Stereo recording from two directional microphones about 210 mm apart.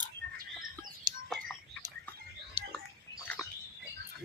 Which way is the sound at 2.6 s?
30° right (ahead or behind).